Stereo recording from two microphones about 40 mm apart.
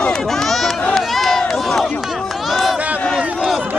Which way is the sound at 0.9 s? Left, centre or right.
Centre.